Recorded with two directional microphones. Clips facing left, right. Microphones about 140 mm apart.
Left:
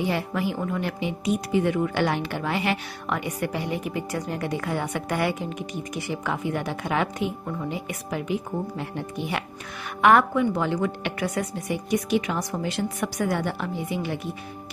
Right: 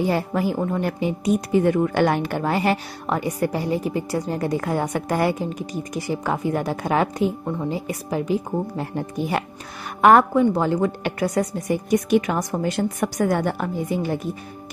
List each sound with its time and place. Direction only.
0.0 s a woman's voice: 40° right (ahead or behind)